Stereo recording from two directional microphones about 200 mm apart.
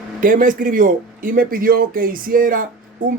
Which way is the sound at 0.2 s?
45° right (ahead or behind).